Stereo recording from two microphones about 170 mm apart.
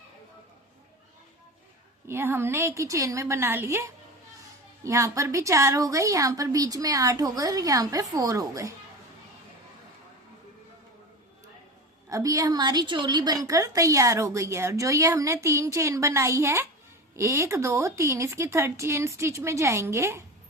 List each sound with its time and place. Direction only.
2.0 s a woman's voice: 15° right (ahead or behind)
12.0 s a woman's voice: 20° right (ahead or behind)